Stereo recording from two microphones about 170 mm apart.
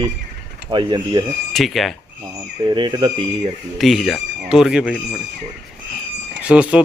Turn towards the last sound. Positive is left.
turn(degrees=-5)  # may be behind; listen again after turning